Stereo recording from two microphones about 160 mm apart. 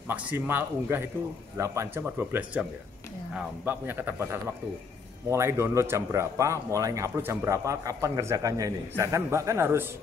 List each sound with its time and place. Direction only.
0.1 s speech: 10° right (ahead or behind)